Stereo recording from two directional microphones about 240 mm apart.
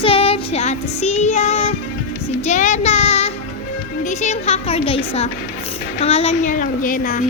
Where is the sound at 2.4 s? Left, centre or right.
Left.